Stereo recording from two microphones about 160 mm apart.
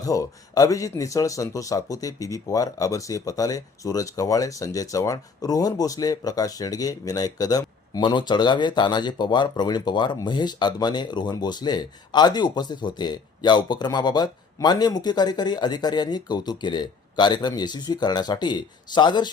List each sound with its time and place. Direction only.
0.0 s speech: 20° left (ahead or behind)